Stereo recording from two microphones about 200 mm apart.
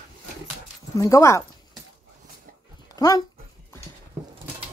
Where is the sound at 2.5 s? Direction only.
40° right (ahead or behind).